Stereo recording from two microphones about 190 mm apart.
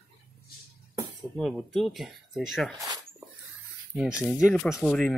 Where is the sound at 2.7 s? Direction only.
20° right (ahead or behind).